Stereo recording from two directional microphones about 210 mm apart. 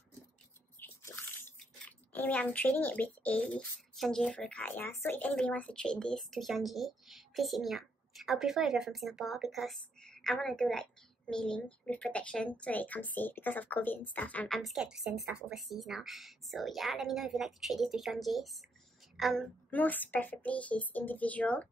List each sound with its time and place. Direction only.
0.7 s a woman's voice: 10° left (ahead or behind)